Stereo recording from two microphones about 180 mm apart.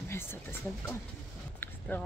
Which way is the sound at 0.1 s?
15° left (ahead or behind).